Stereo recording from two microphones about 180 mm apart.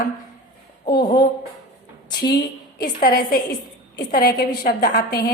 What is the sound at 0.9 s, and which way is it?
Speech, 60° left (ahead or behind).